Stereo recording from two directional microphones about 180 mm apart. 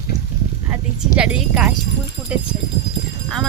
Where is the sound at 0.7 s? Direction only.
5° right (ahead or behind).